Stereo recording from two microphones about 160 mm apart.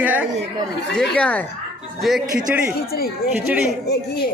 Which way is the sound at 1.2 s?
10° left (ahead or behind).